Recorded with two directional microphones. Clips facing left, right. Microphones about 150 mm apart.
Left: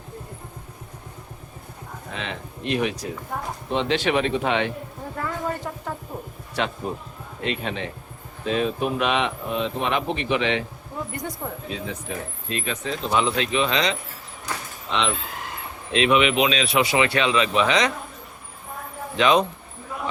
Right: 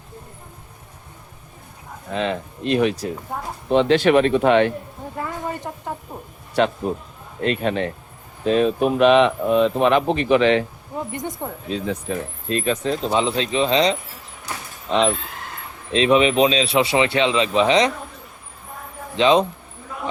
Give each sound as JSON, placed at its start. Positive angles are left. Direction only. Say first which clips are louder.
{"t": 2.1, "sound": "speech", "louder": "right 10 dB", "side_deg": -40}
{"t": 3.7, "sound": "speech", "louder": "right 8 dB", "side_deg": -50}
{"t": 5.1, "sound": "a sound", "louder": "even", "side_deg": -15}
{"t": 6.6, "sound": "speech", "louder": "right 7 dB", "side_deg": -45}
{"t": 11.1, "sound": "speech", "louder": "right 3 dB", "side_deg": -20}
{"t": 12.5, "sound": "speech", "louder": "right 8 dB", "side_deg": -40}
{"t": 13.1, "sound": "speech", "louder": "even", "side_deg": -30}
{"t": 19.1, "sound": "speech", "louder": "right 3 dB", "side_deg": -25}